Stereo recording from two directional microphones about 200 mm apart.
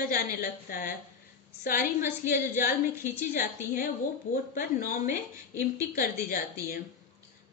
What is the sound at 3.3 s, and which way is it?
A woman's voice, 45° left (ahead or behind).